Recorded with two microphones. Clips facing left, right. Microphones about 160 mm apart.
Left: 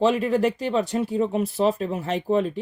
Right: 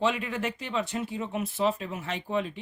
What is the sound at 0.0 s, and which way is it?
Speech, 35° left (ahead or behind).